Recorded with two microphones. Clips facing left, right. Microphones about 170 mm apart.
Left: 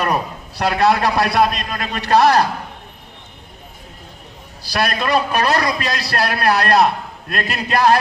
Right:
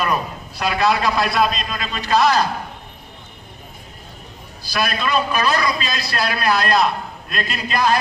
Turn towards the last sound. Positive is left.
turn(degrees=70)  # may be behind; listen again after turning